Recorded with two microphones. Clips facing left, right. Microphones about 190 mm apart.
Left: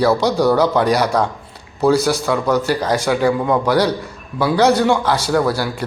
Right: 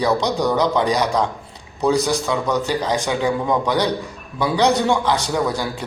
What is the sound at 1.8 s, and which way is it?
Speech, 15° right (ahead or behind).